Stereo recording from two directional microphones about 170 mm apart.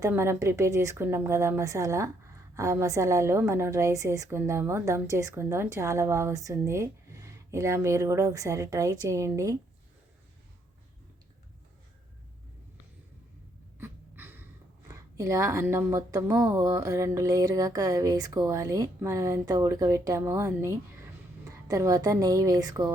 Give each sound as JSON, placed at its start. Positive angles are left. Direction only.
{"t": 0.1, "sound": "speech", "side_deg": -15}
{"t": 13.7, "sound": "gasp", "side_deg": -15}
{"t": 14.8, "sound": "a woman's voice", "side_deg": -20}